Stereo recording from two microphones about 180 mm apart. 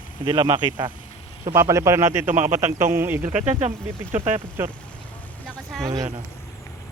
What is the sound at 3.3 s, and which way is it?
A man's voice, 40° right (ahead or behind).